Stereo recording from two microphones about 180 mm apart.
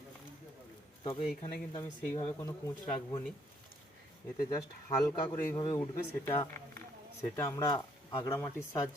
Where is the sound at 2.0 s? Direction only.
10° left (ahead or behind).